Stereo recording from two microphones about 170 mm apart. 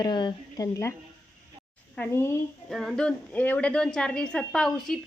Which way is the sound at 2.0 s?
15° left (ahead or behind).